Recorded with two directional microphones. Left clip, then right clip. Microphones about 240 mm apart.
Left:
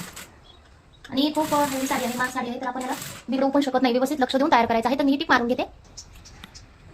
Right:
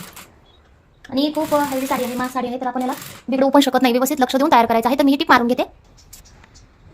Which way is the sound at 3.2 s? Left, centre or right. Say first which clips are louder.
Right 8 dB; right.